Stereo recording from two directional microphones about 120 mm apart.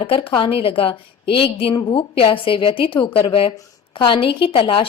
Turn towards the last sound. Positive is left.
turn(degrees=45)  # may be behind; listen again after turning